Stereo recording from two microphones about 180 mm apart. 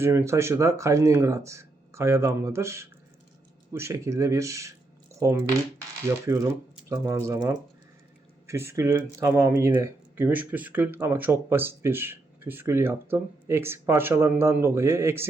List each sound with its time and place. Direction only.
0.0 s speech: 15° right (ahead or behind)